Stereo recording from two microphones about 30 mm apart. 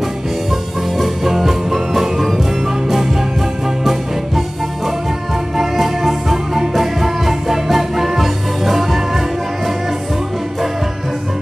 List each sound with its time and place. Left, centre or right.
0.9 s music: centre
5.6 s music: centre
6.3 s music: centre